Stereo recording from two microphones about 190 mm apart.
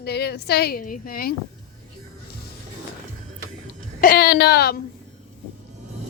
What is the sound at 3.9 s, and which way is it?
Speech, 50° left (ahead or behind).